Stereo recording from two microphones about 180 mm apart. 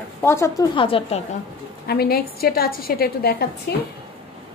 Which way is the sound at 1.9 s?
60° left (ahead or behind).